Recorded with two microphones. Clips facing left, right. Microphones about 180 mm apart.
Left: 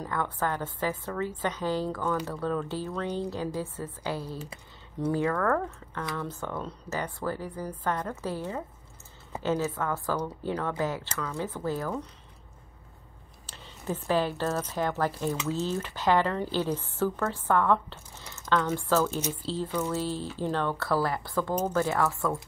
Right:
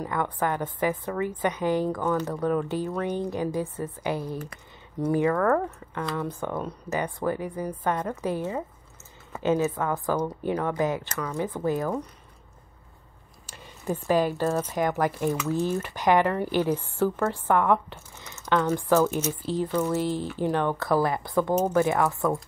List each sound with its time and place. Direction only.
0.0 s a woman's voice: 15° right (ahead or behind)
13.5 s a woman's voice: 10° right (ahead or behind)